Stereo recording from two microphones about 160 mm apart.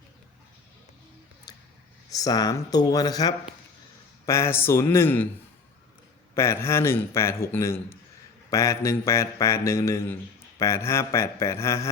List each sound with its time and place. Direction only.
1.5 s a sound: 25° left (ahead or behind)
2.0 s speech: 20° left (ahead or behind)
6.3 s speech: 15° left (ahead or behind)